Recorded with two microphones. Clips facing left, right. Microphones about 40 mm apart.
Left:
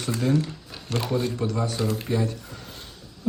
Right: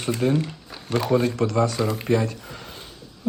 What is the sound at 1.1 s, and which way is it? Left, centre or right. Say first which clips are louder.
Speech: right 6 dB; right.